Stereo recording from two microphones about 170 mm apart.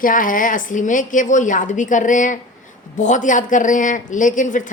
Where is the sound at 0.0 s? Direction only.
50° left (ahead or behind).